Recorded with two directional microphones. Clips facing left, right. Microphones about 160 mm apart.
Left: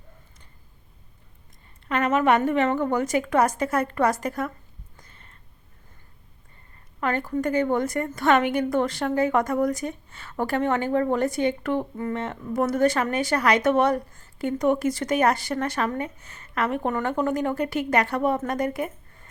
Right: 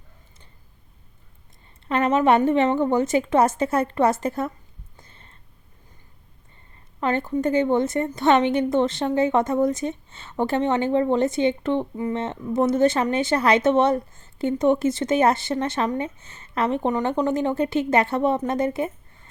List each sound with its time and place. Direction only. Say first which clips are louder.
1.9 s a woman's voice: right 2 dB; 30° right (ahead or behind)
4.9 s a sound: right 3 dB; 30° right (ahead or behind)
7.0 s a woman's voice: right 3 dB; 25° right (ahead or behind)